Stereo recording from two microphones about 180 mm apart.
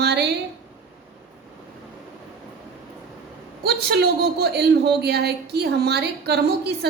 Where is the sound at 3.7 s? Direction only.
60° right (ahead or behind).